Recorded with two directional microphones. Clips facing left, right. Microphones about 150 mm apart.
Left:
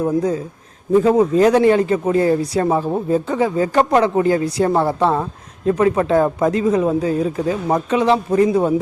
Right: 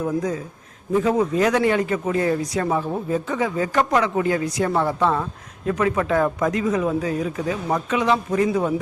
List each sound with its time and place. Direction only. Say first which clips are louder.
0.0 s speech: left 5 dB; 30° left (ahead or behind)